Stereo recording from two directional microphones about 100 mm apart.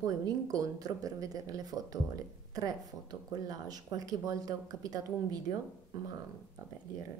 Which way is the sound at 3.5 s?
40° right (ahead or behind).